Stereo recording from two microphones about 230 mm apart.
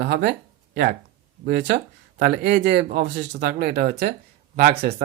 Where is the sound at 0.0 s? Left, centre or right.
Right.